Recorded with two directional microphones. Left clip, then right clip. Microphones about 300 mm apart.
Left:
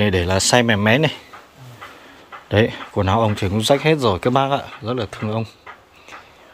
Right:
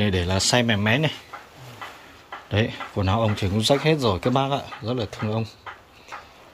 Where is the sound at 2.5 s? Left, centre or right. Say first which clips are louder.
Left 8 dB; centre.